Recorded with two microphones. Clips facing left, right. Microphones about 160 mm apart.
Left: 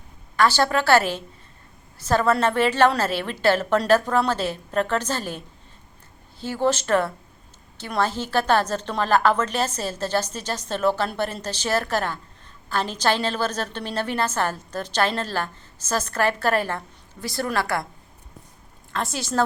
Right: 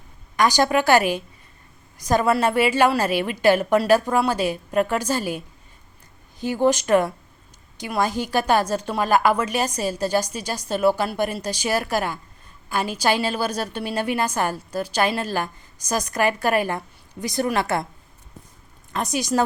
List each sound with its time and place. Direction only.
0.3 s a woman's voice: 15° right (ahead or behind)
6.4 s a woman's voice: 15° right (ahead or behind)
18.9 s a woman's voice: 15° right (ahead or behind)